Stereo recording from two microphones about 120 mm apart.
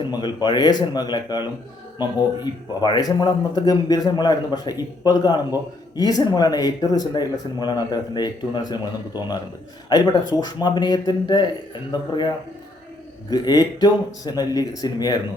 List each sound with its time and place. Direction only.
0.1 s speech: 35° left (ahead or behind)
13.3 s speech: 35° left (ahead or behind)